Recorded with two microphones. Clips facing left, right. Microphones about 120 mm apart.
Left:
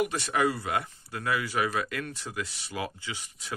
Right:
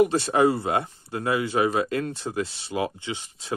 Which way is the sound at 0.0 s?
30° right (ahead or behind).